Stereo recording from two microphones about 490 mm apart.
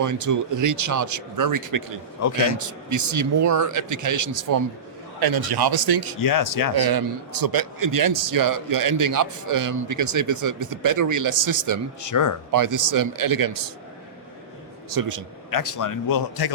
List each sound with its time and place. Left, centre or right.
0.0 s a man's voice: right
2.2 s a man's voice: left
2.6 s a man's voice: right
6.1 s a man's voice: left
6.7 s a man's voice: right
12.0 s a man's voice: left
12.5 s a man's voice: right
14.9 s a man's voice: right
15.4 s a man's voice: left